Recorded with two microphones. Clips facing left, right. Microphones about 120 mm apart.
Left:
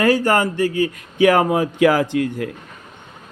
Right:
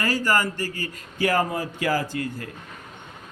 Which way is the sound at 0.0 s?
55° left (ahead or behind).